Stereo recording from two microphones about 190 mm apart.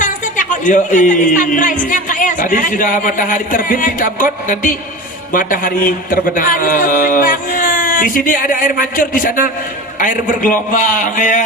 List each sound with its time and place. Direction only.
0.0 s speech: 40° left (ahead or behind)